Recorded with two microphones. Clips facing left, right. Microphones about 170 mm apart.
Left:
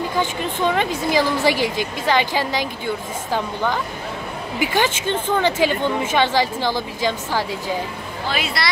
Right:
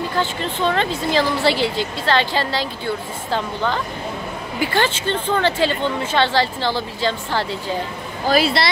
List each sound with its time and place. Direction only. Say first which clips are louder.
0.1 s speech: even; 15° left (ahead or behind)
8.3 s speech: right 8 dB; 35° right (ahead or behind)